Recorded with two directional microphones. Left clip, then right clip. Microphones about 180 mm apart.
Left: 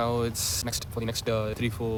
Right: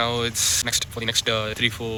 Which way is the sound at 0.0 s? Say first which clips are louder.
Right 5 dB; 10° left (ahead or behind).